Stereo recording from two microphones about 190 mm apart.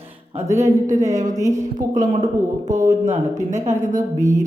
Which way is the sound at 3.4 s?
40° right (ahead or behind).